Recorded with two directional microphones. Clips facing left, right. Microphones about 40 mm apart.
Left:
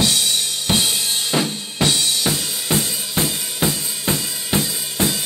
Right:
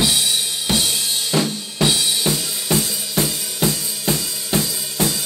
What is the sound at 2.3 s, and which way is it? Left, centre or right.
Drum kit, centre.